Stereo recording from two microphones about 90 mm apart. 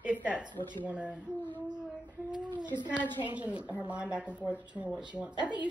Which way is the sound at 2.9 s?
55° right (ahead or behind).